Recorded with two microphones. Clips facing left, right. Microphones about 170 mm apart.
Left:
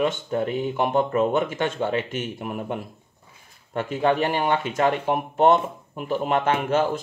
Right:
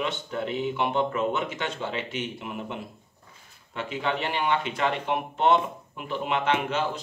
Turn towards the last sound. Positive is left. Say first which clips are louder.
# left 5 dB
turn(degrees=45)  # may be behind; listen again after turning